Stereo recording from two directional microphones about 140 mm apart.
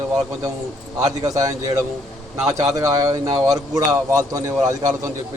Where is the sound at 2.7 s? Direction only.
25° right (ahead or behind).